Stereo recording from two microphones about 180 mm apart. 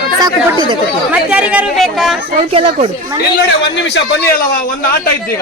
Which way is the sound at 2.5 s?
35° right (ahead or behind).